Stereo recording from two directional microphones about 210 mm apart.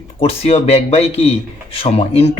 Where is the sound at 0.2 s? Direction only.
30° left (ahead or behind).